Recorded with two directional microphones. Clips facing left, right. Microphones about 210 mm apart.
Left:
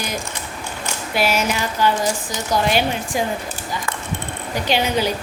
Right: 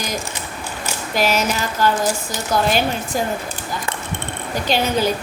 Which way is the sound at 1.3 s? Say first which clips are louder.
Right 1 dB; 10° left (ahead or behind).